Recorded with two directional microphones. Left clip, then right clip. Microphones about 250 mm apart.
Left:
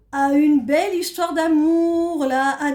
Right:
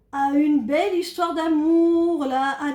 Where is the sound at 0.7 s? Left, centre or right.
Left.